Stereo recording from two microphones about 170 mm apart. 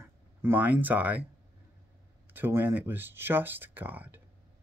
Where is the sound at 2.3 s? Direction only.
10° right (ahead or behind).